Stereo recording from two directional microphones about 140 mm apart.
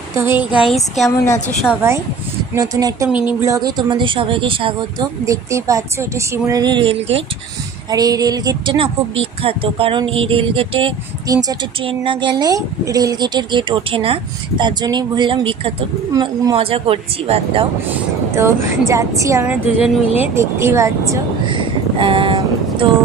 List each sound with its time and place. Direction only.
0.1 s speech: 20° right (ahead or behind); by 1.1 s centre (ahead or behind)
1.1 s a woman's voice: 20° left (ahead or behind)
1.8 s a woman's voice: 20° right (ahead or behind); by 5.0 s 35° right (ahead or behind)
5.2 s a woman's voice: 20° right (ahead or behind); by 7.2 s 40° right (ahead or behind)
7.9 s speech: 25° right (ahead or behind)
11.3 s speech: 25° right (ahead or behind)
14.6 s speech: 30° right (ahead or behind)
16.1 s a woman's voice: 25° right (ahead or behind)
16.6 s speech: 40° right (ahead or behind)
18.3 s a woman's voice: 20° right (ahead or behind)
19.4 s a woman's voice: 10° right (ahead or behind)
21.4 s speech: 35° right (ahead or behind)